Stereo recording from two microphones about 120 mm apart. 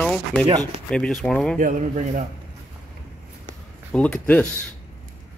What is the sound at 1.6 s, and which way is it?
Speech, 90° right.